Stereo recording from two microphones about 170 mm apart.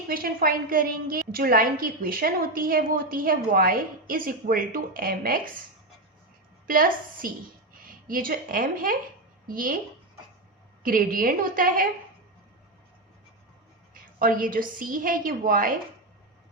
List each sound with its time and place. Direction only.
0.1 s a woman's voice: 60° right (ahead or behind)
6.7 s a woman's voice: 55° right (ahead or behind)
10.8 s a woman's voice: 55° right (ahead or behind)
13.9 s a woman's voice: 55° right (ahead or behind)